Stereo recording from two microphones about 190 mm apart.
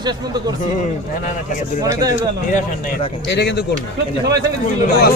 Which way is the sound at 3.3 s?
65° left (ahead or behind).